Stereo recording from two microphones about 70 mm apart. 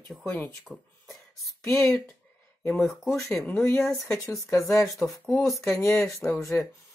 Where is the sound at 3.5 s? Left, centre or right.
Left.